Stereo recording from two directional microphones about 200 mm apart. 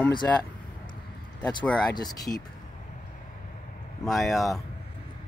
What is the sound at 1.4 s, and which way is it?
Speech, 20° left (ahead or behind).